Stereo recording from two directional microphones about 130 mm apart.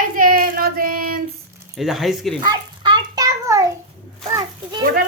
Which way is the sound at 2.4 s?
30° right (ahead or behind).